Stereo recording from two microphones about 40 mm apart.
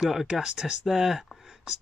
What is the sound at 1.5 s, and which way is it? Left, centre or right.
Whispering, centre.